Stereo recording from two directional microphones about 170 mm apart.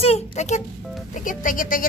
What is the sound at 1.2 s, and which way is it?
Speech, 50° left (ahead or behind).